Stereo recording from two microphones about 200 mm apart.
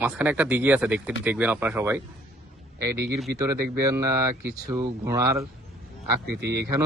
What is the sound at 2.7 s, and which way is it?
Speech, 55° right (ahead or behind).